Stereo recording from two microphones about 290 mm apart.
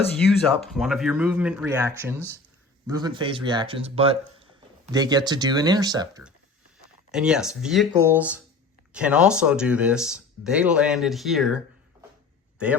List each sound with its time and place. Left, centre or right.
0.7 s speech: centre